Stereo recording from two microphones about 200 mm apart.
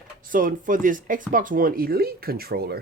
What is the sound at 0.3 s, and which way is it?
Speech, 40° right (ahead or behind).